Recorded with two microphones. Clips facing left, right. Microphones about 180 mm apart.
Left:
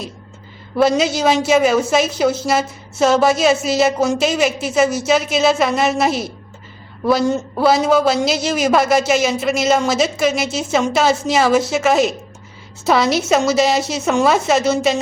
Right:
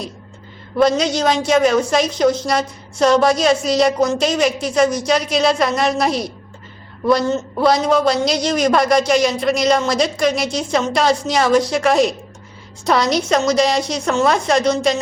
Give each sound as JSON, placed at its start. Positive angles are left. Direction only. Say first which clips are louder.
{"t": 0.8, "sound": "a man's voice", "louder": "even", "side_deg": 5}
{"t": 7.3, "sound": "a man's voice", "louder": "left 1 dB", "side_deg": 15}